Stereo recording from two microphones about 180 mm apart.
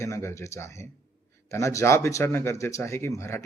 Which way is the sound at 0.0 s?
15° left (ahead or behind).